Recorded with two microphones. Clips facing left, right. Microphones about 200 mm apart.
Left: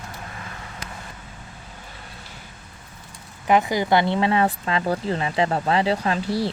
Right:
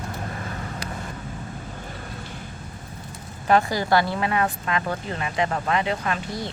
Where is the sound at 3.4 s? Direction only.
15° left (ahead or behind); by 6.5 s 30° left (ahead or behind).